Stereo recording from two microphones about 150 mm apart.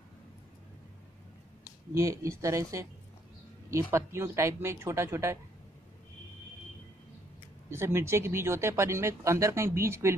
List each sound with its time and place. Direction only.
2.0 s speech: 20° right (ahead or behind)
7.7 s speech: 20° right (ahead or behind)